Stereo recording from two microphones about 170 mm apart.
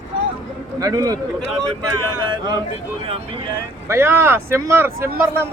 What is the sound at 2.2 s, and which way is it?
Speech, 25° right (ahead or behind).